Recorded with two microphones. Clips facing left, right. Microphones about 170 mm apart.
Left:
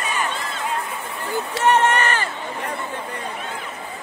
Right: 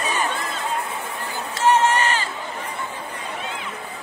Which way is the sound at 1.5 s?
60° left (ahead or behind).